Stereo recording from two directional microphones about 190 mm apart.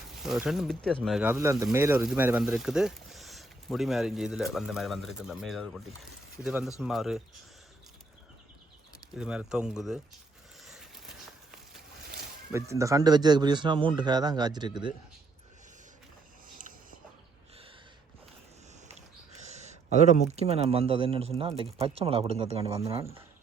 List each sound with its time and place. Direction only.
0.1 s speech: centre (ahead or behind)
1.3 s speech: 15° right (ahead or behind)
9.1 s speech: 5° right (ahead or behind)
10.7 s a sound: centre (ahead or behind)
12.5 s speech: 15° right (ahead or behind)
18.9 s speech: 35° right (ahead or behind)